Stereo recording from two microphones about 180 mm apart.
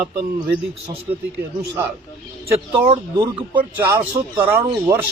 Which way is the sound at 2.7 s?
25° right (ahead or behind).